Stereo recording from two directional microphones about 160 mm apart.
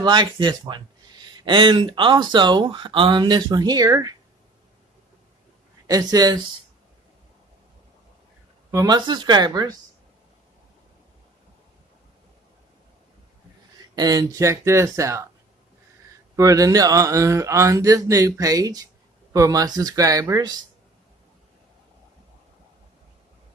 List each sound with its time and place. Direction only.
0.0 s speech: 30° right (ahead or behind)
5.9 s speech: 25° right (ahead or behind)
8.7 s speech: 25° right (ahead or behind)
13.9 s speech: 25° right (ahead or behind)
16.3 s speech: 20° right (ahead or behind)